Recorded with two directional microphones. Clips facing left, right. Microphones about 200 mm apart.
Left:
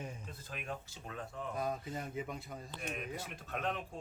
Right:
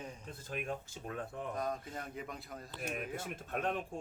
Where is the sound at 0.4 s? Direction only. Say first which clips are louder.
Right 5 dB; 50° right (ahead or behind).